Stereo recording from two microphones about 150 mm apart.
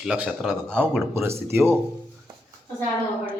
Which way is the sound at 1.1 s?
15° right (ahead or behind).